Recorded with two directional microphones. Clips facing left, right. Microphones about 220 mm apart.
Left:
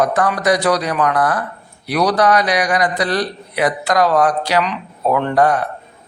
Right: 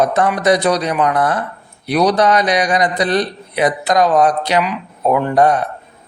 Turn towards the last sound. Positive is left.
turn(degrees=-20)  # may be behind; listen again after turning